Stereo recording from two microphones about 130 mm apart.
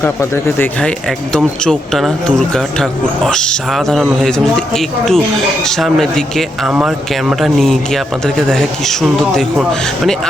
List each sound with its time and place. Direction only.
0.0 s speech: 15° left (ahead or behind)
0.8 s speech: 5° left (ahead or behind)